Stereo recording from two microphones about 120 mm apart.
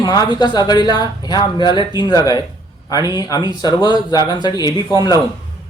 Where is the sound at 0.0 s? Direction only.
35° left (ahead or behind).